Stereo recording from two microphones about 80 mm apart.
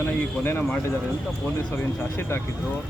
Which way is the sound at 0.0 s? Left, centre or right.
Left.